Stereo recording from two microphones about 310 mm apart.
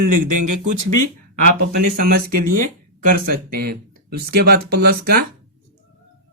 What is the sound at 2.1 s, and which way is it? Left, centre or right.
Speech, right.